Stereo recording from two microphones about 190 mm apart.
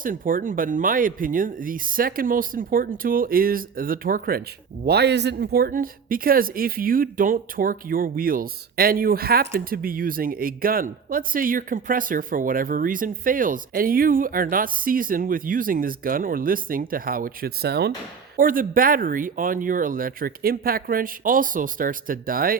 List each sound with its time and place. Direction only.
0.0 s speech: 45° right (ahead or behind)
4.9 s speech: 60° right (ahead or behind)
18.3 s speech: 45° right (ahead or behind)